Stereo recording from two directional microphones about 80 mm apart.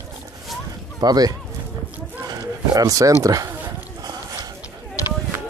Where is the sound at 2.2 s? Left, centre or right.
Right.